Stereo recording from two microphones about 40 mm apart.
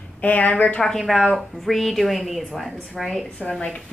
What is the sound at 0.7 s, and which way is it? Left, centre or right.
Speech, centre.